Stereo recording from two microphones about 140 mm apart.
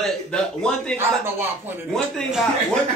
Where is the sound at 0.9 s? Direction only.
15° right (ahead or behind).